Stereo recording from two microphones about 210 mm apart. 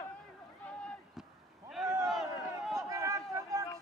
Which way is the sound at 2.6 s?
Centre (ahead or behind).